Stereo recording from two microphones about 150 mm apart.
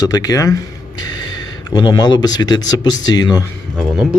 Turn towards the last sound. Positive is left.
turn(degrees=0)  # may be behind; listen again after turning